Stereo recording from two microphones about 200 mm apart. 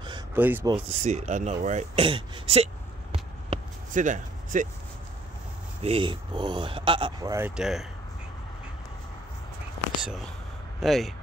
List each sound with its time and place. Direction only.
0.4 s speech: 10° right (ahead or behind)
0.8 s speech: 35° right (ahead or behind)
5.8 s speech: 30° right (ahead or behind); by 7.8 s centre (ahead or behind)
10.8 s speech: centre (ahead or behind)